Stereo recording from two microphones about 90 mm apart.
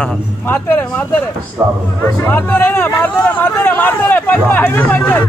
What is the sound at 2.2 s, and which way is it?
Speech, 20° left (ahead or behind).